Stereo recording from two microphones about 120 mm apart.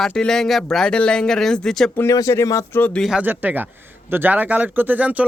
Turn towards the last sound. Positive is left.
turn(degrees=-10)  # may be behind; listen again after turning